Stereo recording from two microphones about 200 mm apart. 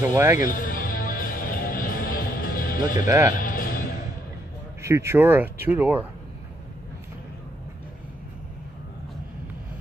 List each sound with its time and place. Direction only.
0.0 s speech: 10° right (ahead or behind)
0.4 s music: 40° left (ahead or behind)
3.1 s speech: 15° right (ahead or behind)
3.3 s music: 45° left (ahead or behind)
4.8 s speech: 15° right (ahead or behind)